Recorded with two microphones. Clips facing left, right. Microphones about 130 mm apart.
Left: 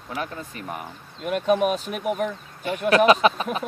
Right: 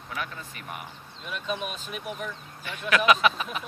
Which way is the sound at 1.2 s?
55° left (ahead or behind).